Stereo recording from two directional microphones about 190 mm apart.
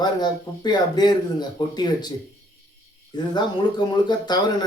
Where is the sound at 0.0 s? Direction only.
20° left (ahead or behind).